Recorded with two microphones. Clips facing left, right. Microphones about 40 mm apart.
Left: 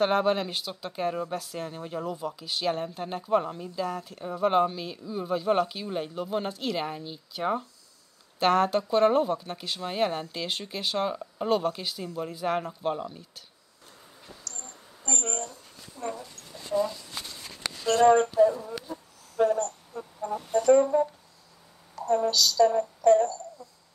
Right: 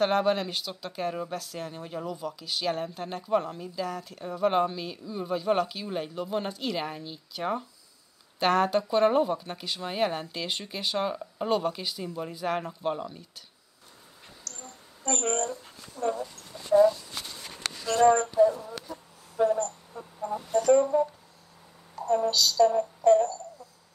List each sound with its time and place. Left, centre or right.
0.0 s speech: centre
15.0 s speech: centre
16.0 s a sound: right
16.7 s speech: right
17.1 s a sound: centre
18.4 s speech: left
18.7 s speech: centre
19.4 s speech: left
19.9 s speech: centre
20.5 s speech: centre
22.3 s a sound: right